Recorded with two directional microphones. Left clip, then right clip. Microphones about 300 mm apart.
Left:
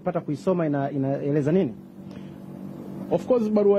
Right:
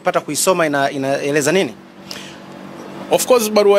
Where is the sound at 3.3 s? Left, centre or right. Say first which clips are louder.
Right 8 dB; centre.